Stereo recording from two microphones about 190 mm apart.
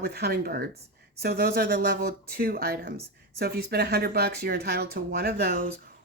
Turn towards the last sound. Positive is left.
turn(degrees=-50)  # may be behind; listen again after turning